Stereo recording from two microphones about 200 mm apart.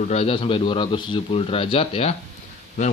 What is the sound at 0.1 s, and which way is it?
Speech, 30° left (ahead or behind).